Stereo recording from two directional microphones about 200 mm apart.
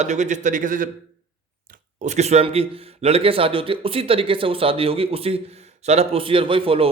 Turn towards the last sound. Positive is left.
turn(degrees=-25)  # may be behind; listen again after turning